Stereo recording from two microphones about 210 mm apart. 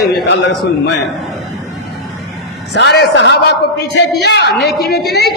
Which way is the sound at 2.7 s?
55° left (ahead or behind).